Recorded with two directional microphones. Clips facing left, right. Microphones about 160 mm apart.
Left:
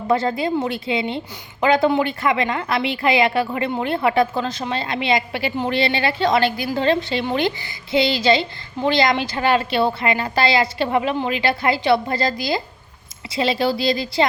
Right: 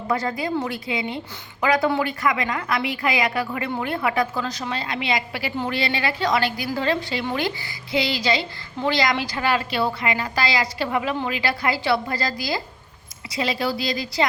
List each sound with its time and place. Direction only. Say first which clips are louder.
0.1 s a woman's voice: left 5 dB; 25° left (ahead or behind)